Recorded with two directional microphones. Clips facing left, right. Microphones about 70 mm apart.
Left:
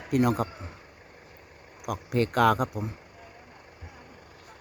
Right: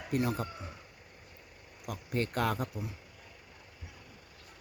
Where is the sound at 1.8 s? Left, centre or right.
Left.